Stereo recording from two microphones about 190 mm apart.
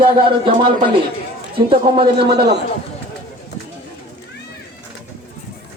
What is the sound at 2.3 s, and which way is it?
Speech, 60° right (ahead or behind).